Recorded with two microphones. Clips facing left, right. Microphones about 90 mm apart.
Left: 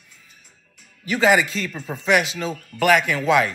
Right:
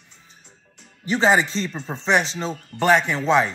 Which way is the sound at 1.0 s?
30° right (ahead or behind).